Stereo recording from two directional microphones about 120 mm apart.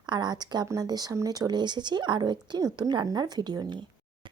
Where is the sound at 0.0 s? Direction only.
35° right (ahead or behind).